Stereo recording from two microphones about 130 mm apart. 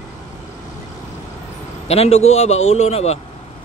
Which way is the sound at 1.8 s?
55° left (ahead or behind).